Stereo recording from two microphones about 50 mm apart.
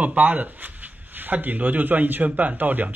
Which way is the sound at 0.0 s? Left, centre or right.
Right.